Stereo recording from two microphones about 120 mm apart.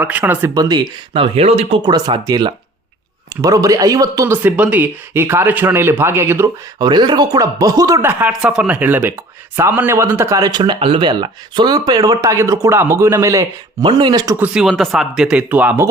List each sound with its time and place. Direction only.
0.0 s speech: 15° right (ahead or behind)
0.5 s speech: 30° right (ahead or behind)
1.1 s speech: 55° right (ahead or behind)
1.8 s a man's voice: 35° right (ahead or behind)
4.3 s speech: 15° right (ahead or behind)
6.7 s speech: 35° right (ahead or behind)
8.3 s a man's voice: 5° right (ahead or behind); by 13.4 s 25° right (ahead or behind)
13.8 s speech: 40° right (ahead or behind)
14.3 s speech: 10° right (ahead or behind)